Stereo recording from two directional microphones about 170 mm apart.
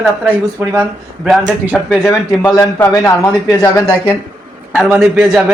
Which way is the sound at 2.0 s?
20° left (ahead or behind).